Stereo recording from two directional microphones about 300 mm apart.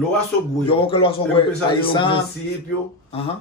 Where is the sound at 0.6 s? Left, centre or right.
Centre.